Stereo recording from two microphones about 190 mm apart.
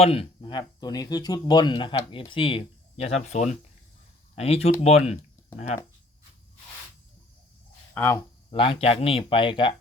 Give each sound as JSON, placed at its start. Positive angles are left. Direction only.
{"t": 0.0, "sound": "speech", "side_deg": 30}
{"t": 7.9, "sound": "speech", "side_deg": 10}
{"t": 8.4, "sound": "speech", "side_deg": 30}